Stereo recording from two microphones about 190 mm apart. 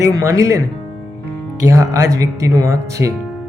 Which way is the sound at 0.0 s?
15° right (ahead or behind).